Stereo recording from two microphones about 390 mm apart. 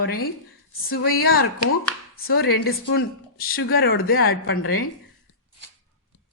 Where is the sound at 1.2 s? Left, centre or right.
Left.